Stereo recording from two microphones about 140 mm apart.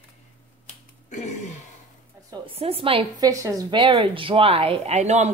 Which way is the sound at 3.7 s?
35° right (ahead or behind).